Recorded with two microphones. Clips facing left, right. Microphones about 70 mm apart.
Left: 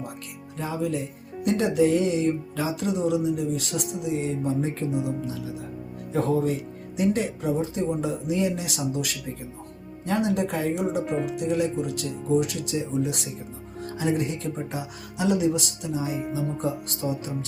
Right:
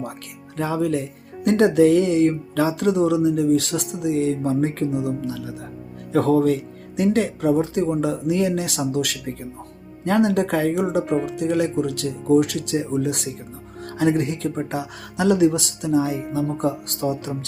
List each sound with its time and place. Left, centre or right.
0.5 s speech: right
5.0 s speech: right
6.1 s speech: right
11.1 s speech: centre
11.3 s speech: right
12.3 s speech: right
13.8 s speech: right
14.7 s speech: right
16.3 s speech: right